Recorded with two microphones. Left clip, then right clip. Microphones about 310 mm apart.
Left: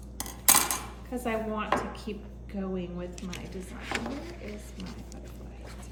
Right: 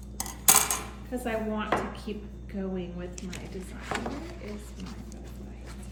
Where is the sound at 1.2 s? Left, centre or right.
Centre.